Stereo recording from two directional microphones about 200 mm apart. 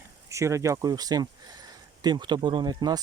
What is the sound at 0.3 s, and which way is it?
Speech, 15° right (ahead or behind).